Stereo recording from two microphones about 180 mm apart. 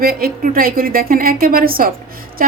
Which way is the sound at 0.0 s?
55° right (ahead or behind).